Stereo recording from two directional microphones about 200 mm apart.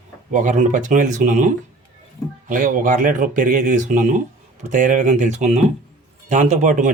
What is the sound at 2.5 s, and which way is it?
A man's voice, 40° right (ahead or behind).